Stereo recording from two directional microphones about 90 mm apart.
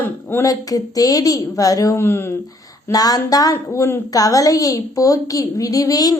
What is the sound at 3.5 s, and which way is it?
A woman's voice, 30° left (ahead or behind).